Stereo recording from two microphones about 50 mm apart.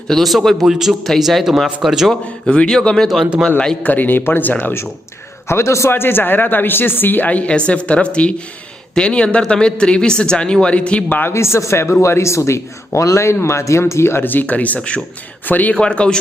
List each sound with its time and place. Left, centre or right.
0.1 s a man's voice: centre
2.5 s speech: centre
3.8 s speech: left
4.6 s a woman's voice: left
5.5 s a man's voice: left
5.9 s a woman's voice: left
11.3 s a man's voice: left
14.3 s speech: left
15.4 s speech: left
15.7 s speech: centre